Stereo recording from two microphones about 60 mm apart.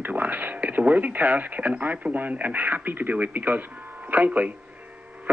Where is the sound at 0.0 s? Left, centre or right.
Right.